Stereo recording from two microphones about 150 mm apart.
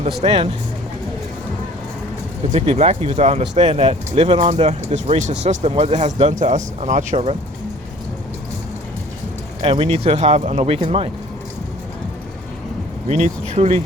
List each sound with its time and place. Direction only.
0.2 s speech: 40° right (ahead or behind)
2.5 s speech: 50° right (ahead or behind)
9.6 s speech: 40° right (ahead or behind)
13.1 s speech: 50° right (ahead or behind)